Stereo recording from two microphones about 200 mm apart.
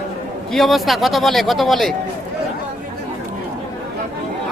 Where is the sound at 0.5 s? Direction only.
Centre (ahead or behind).